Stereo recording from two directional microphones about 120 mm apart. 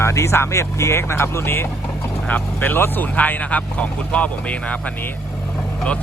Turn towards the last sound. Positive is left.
turn(degrees=10)  # may be behind; listen again after turning